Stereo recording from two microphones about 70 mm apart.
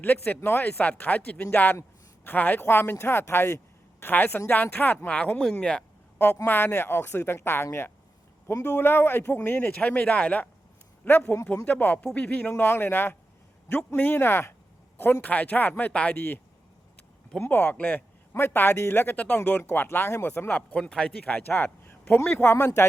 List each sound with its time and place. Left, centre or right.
0.0 s a man's voice: left
6.1 s a man's voice: left
16.1 s a man's voice: left
17.4 s a man's voice: left
20.5 s a man's voice: left
22.5 s speech: left